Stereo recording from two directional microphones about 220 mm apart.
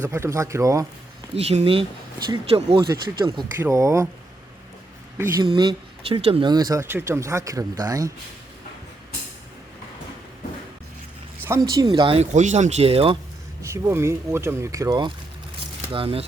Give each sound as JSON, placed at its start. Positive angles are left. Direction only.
{"t": 0.0, "sound": "speech", "side_deg": -10}
{"t": 1.4, "sound": "speech", "side_deg": -30}
{"t": 5.1, "sound": "speech", "side_deg": -10}
{"t": 5.5, "sound": "speech", "side_deg": -25}
{"t": 11.7, "sound": "speech", "side_deg": -20}
{"t": 13.6, "sound": "speech", "side_deg": -10}